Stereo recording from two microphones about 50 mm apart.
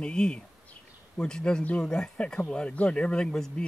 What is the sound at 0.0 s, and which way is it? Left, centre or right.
Speech, centre.